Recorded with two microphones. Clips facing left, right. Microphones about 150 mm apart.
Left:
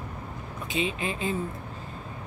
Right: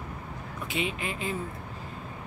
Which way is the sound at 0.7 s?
25° left (ahead or behind).